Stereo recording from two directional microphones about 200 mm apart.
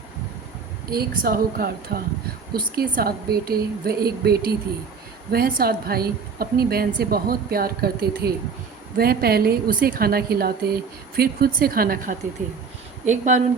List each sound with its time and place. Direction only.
0.9 s a woman's voice: 50° right (ahead or behind)